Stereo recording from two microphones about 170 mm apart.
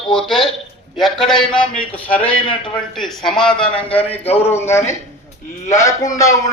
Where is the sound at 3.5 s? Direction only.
30° left (ahead or behind).